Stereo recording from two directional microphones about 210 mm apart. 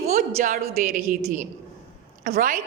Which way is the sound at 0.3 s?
35° right (ahead or behind).